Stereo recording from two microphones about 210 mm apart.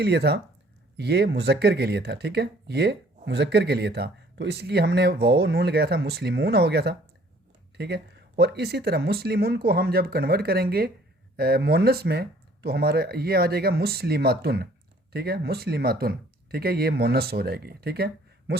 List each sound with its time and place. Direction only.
0.0 s speech: 50° right (ahead or behind)